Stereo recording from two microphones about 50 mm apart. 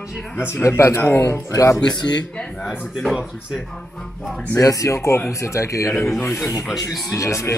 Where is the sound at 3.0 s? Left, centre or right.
Centre.